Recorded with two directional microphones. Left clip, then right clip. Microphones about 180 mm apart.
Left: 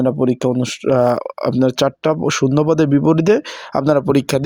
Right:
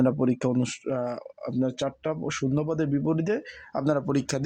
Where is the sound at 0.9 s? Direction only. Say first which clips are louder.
Left 16 dB; 65° left (ahead or behind).